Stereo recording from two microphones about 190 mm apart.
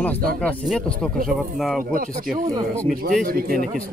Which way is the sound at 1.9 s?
45° right (ahead or behind).